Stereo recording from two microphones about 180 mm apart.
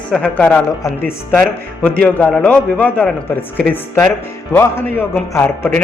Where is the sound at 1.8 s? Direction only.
5° left (ahead or behind).